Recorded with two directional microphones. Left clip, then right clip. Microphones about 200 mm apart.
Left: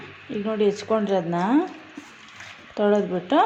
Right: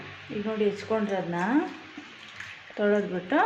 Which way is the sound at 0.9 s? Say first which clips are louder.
Left 6 dB; 40° left (ahead or behind).